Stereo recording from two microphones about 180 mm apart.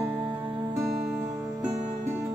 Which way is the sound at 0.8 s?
Centre (ahead or behind).